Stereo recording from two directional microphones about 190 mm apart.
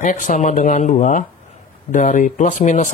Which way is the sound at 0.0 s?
40° left (ahead or behind).